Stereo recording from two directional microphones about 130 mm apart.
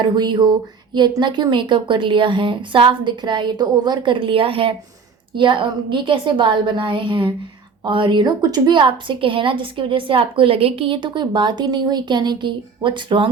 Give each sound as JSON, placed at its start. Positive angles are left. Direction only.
{"t": 0.0, "sound": "a woman's voice", "side_deg": -35}